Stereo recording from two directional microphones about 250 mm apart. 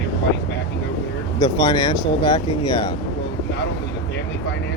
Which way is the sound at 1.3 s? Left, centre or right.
Centre.